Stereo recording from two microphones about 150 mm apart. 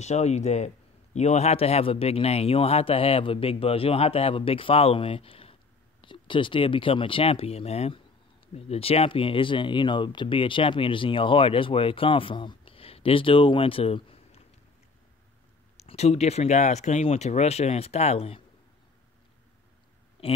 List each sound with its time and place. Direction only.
0.0 s a man's voice: 50° left (ahead or behind)
15.8 s speech: 45° left (ahead or behind)
20.2 s speech: 40° left (ahead or behind)